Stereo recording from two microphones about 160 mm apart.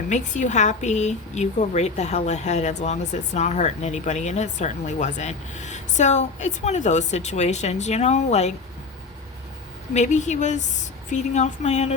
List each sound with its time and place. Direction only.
0.1 s a woman's voice: 50° left (ahead or behind)
9.9 s a woman's voice: 45° left (ahead or behind)